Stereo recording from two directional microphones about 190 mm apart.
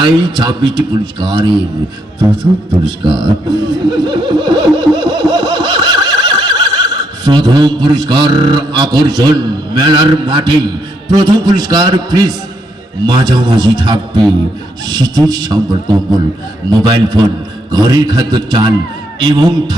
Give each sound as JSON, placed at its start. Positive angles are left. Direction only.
{"t": 0.0, "sound": "a man's voice", "side_deg": -25}
{"t": 16.6, "sound": "speech", "side_deg": -20}